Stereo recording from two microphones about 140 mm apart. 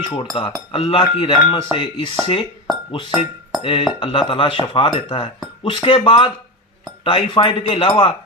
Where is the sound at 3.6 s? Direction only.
40° left (ahead or behind).